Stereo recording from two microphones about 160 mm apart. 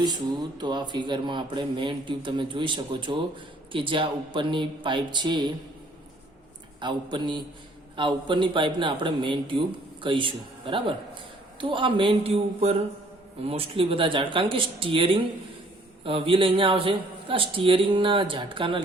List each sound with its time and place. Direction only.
0.6 s a man's voice: 25° right (ahead or behind)
6.7 s a man's voice: 30° right (ahead or behind)